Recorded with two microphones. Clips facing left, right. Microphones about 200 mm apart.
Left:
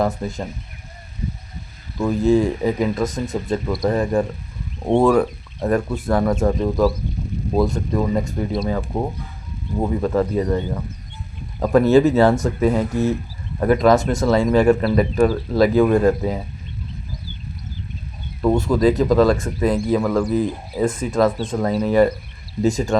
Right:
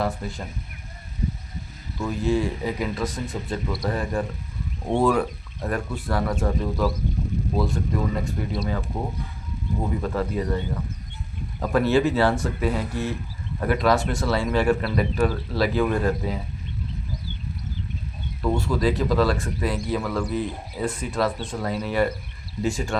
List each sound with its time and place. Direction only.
0.0 s speech: 45° left (ahead or behind)
2.0 s speech: 45° left (ahead or behind)
10.0 s speech: 45° left (ahead or behind)
11.6 s speech: 45° left (ahead or behind)
18.4 s speech: 45° left (ahead or behind)